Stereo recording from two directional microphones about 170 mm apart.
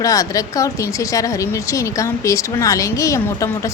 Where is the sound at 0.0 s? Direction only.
20° left (ahead or behind).